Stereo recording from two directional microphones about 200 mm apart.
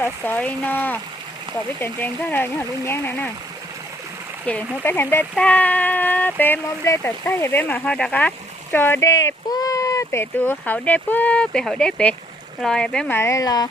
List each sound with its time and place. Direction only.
0.0 s speech: 10° left (ahead or behind)
4.4 s speech: 10° left (ahead or behind)